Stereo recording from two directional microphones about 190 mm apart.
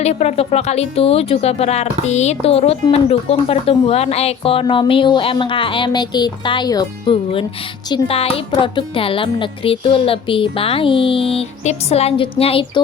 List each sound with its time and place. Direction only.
0.0 s speech: 35° left (ahead or behind)